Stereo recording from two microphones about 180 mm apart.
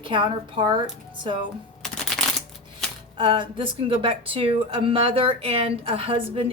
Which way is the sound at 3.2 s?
30° right (ahead or behind).